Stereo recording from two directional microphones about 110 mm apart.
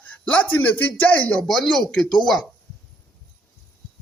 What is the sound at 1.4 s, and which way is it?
Speech, 5° left (ahead or behind).